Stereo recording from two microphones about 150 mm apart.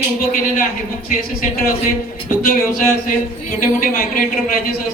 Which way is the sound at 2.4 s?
70° left (ahead or behind).